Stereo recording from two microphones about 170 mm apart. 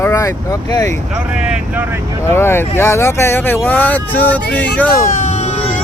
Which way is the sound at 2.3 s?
15° left (ahead or behind).